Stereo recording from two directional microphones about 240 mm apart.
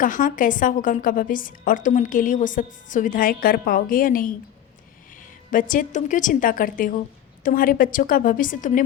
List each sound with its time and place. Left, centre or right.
0.0 s a woman's voice: left